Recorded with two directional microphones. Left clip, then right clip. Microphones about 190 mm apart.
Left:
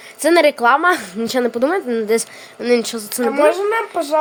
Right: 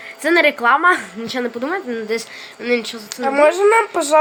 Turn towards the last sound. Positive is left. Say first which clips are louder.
# right 5 dB
turn(degrees=-25)  # may be behind; listen again after turning